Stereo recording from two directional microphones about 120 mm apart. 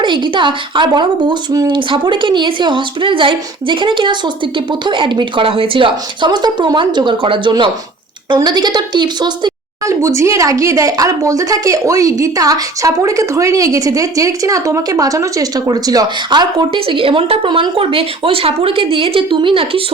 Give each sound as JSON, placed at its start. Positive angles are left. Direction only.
{"t": 0.0, "sound": "a woman's voice", "side_deg": -40}
{"t": 9.8, "sound": "speech", "side_deg": -25}